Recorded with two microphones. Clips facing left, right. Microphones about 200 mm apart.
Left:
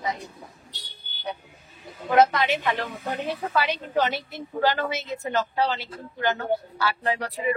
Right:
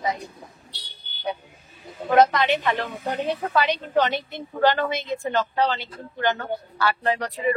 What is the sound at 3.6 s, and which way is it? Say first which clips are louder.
Speech: right 3 dB; 5° left (ahead or behind).